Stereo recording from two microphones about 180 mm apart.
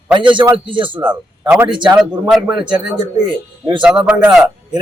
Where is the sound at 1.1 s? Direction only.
10° right (ahead or behind).